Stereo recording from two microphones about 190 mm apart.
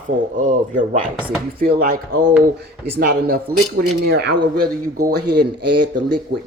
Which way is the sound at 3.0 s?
55° right (ahead or behind).